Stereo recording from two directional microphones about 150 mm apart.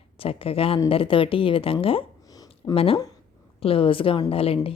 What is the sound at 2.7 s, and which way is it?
Speech, 40° left (ahead or behind).